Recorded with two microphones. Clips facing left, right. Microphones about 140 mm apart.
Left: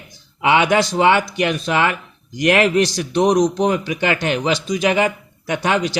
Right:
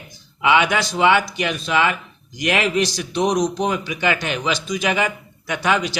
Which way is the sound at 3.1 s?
40° left (ahead or behind).